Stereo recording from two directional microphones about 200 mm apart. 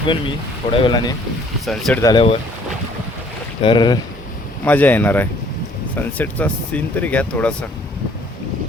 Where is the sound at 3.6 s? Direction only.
25° left (ahead or behind).